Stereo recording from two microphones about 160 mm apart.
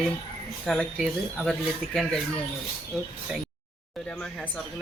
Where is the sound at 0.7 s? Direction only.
5° left (ahead or behind).